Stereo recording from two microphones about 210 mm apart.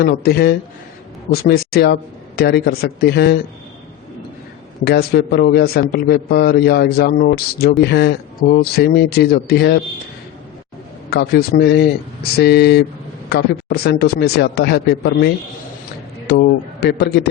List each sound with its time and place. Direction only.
0.0 s a man's voice: 45° left (ahead or behind)
4.9 s a man's voice: 50° left (ahead or behind)
11.1 s a man's voice: 45° left (ahead or behind)